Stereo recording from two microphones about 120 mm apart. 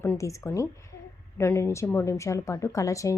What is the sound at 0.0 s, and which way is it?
A woman's voice, 20° left (ahead or behind).